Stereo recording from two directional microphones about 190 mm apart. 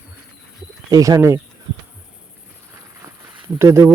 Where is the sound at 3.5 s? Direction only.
15° right (ahead or behind).